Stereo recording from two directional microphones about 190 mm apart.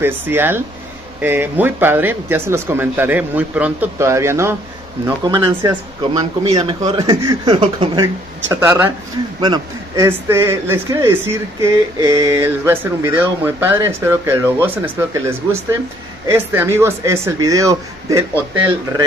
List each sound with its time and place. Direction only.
0.0 s speech: 10° right (ahead or behind)
8.5 s speech: 10° right (ahead or behind)
9.4 s a man's voice: 25° right (ahead or behind)